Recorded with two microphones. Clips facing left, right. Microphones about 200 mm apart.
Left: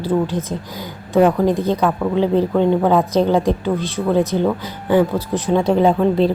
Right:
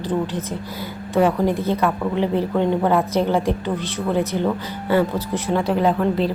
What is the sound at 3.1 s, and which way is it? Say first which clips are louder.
A woman's voice: left 4 dB; 15° left (ahead or behind).